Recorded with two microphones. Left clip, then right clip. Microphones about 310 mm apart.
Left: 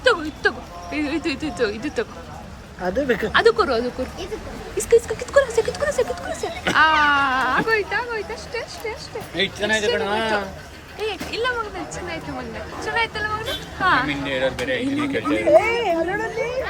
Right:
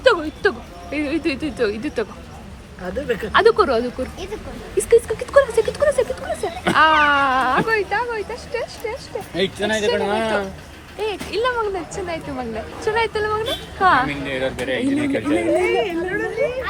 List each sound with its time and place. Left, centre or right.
0.0 s speech: centre
2.8 s speech: left
3.3 s speech: centre
9.3 s speech: right
11.0 s speech: centre
14.1 s speech: centre
15.6 s speech: left